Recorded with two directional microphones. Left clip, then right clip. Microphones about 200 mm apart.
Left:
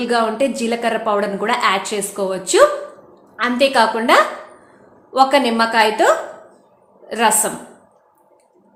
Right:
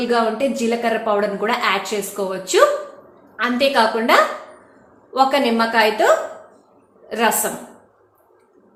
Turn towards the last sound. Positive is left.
turn(degrees=20)  # may be behind; listen again after turning